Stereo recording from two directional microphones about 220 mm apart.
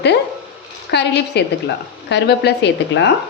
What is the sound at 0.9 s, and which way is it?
Speech, 50° left (ahead or behind).